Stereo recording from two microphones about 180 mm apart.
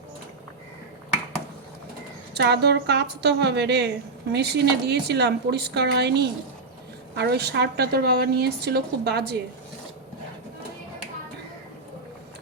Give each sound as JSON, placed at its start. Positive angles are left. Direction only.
{"t": 2.3, "sound": "a woman's voice", "side_deg": -65}